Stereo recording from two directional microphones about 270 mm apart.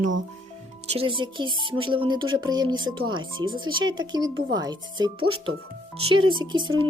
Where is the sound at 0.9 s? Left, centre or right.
Centre.